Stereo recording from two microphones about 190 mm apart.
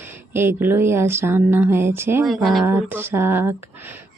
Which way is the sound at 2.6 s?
10° right (ahead or behind).